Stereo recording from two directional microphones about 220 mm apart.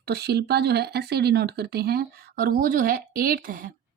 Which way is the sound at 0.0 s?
45° right (ahead or behind).